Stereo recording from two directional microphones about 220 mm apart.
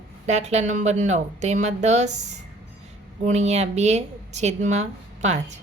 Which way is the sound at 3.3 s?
30° right (ahead or behind).